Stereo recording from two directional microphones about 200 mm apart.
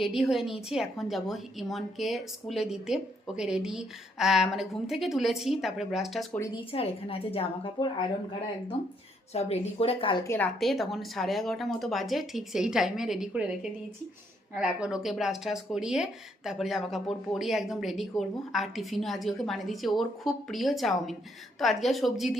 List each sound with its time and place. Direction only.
0.0 s speech: centre (ahead or behind)
6.3 s speech: 15° left (ahead or behind)
6.7 s a woman's voice: 30° left (ahead or behind)
9.3 s a woman's voice: 30° left (ahead or behind)
10.2 s speech: 10° left (ahead or behind)